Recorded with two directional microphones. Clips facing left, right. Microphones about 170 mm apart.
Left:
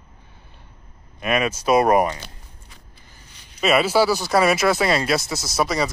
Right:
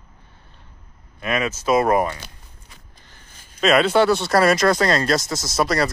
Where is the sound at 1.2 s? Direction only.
15° left (ahead or behind).